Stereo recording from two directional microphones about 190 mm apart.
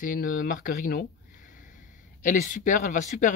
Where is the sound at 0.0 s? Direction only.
45° left (ahead or behind).